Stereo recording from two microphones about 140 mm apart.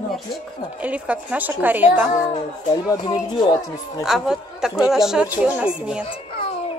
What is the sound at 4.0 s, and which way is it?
Speech, 5° right (ahead or behind).